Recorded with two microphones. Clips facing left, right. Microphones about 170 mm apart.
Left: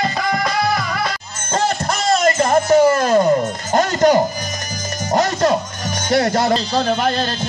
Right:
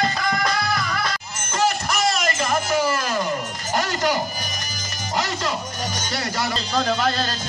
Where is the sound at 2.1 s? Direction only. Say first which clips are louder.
Left 8 dB; 55° left (ahead or behind).